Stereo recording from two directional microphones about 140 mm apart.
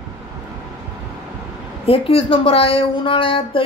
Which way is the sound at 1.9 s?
40° left (ahead or behind).